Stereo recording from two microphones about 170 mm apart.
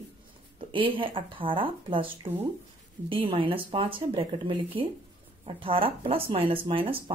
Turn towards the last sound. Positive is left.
turn(degrees=-30)  # may be behind; listen again after turning